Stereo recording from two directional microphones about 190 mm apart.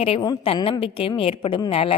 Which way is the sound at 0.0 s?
25° left (ahead or behind).